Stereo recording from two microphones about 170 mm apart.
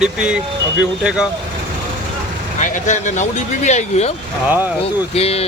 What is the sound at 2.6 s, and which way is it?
Speech, 45° left (ahead or behind).